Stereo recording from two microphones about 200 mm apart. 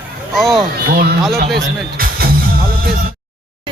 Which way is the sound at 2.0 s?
45° right (ahead or behind).